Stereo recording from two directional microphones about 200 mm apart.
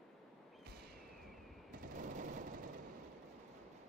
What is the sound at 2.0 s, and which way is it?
Vehicle, 40° right (ahead or behind).